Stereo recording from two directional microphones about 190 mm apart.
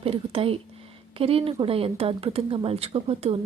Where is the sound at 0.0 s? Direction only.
30° right (ahead or behind).